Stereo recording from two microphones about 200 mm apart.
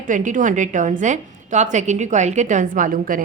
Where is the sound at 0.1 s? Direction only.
40° right (ahead or behind).